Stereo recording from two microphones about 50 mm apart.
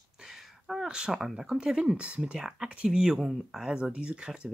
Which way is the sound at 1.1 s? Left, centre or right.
Centre.